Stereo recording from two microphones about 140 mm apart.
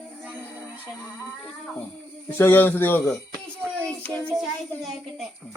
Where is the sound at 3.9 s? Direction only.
10° left (ahead or behind).